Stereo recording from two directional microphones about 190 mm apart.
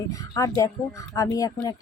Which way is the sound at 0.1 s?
15° left (ahead or behind).